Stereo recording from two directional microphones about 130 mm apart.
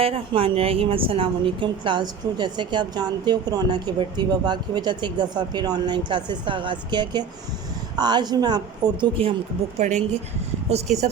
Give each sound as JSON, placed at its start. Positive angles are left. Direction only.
{"t": 0.0, "sound": "a woman's voice", "side_deg": -45}
{"t": 9.7, "sound": "speech", "side_deg": -60}